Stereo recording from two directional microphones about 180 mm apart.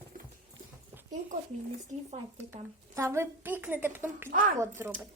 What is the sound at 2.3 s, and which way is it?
A woman's voice, 15° right (ahead or behind).